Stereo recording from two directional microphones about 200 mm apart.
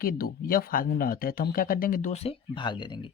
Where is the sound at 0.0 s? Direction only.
45° left (ahead or behind); by 3.1 s 25° left (ahead or behind).